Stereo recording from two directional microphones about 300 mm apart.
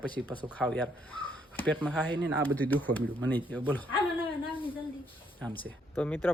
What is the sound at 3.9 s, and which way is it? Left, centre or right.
Speech, centre.